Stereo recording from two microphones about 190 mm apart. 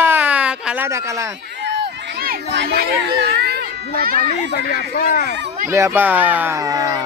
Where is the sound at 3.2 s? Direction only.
55° right (ahead or behind).